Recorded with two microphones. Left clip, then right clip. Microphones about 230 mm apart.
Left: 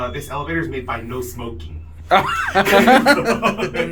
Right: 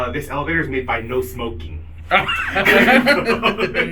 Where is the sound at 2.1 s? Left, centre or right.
Left.